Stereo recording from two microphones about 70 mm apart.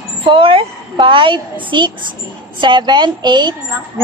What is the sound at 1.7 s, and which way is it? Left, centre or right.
Speech, right.